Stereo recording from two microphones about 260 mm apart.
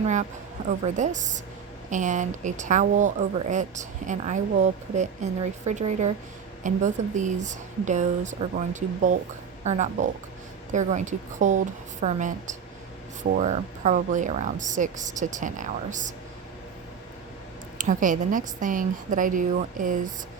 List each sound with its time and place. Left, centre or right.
0.0 s a woman's voice: right
17.7 s a woman's voice: right